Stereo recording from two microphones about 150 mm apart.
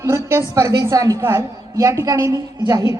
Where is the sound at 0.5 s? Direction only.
25° right (ahead or behind).